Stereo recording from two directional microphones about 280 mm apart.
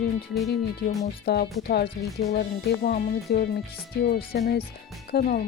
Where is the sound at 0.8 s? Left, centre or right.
Left.